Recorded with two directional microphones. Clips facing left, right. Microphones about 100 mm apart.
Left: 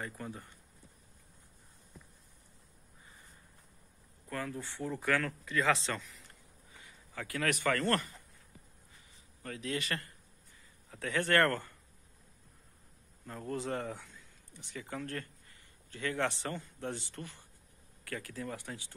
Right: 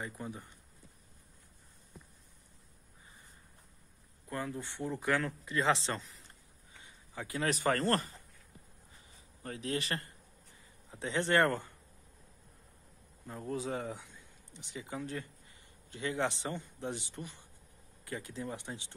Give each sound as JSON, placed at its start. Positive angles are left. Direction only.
{"t": 0.0, "sound": "a man's voice", "side_deg": -15}
{"t": 4.3, "sound": "a man's voice", "side_deg": -20}
{"t": 8.9, "sound": "a sound", "side_deg": -30}
{"t": 10.9, "sound": "a man's voice", "side_deg": -20}
{"t": 13.3, "sound": "a man's voice", "side_deg": -10}